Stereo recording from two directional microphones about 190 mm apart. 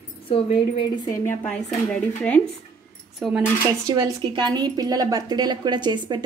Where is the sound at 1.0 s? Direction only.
15° left (ahead or behind).